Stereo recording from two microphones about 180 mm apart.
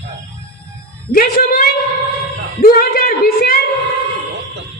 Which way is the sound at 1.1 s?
55° left (ahead or behind).